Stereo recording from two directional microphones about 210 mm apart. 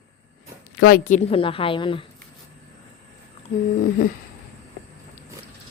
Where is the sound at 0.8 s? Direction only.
45° left (ahead or behind); by 2.0 s 25° left (ahead or behind).